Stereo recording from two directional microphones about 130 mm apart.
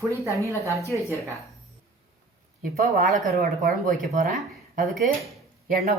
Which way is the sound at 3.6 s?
90° right.